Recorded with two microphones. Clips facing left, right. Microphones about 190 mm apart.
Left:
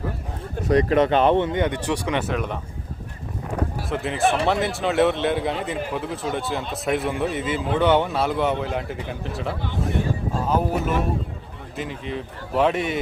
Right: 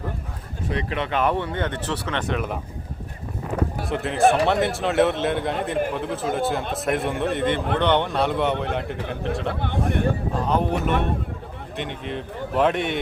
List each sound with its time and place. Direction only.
0.7 s speech: 40° left (ahead or behind)
1.2 s speech: 25° left (ahead or behind); by 2.6 s centre (ahead or behind)
3.8 s a man's voice: centre (ahead or behind)
9.6 s speech: 60° right (ahead or behind)
10.4 s a man's voice: 5° left (ahead or behind)